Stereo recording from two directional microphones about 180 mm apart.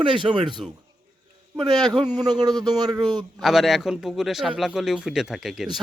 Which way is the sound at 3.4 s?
Centre (ahead or behind).